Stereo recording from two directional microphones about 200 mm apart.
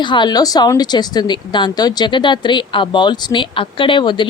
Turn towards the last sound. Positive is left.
turn(degrees=25)  # may be behind; listen again after turning